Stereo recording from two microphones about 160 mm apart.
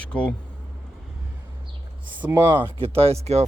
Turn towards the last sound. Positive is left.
turn(degrees=-40)  # may be behind; listen again after turning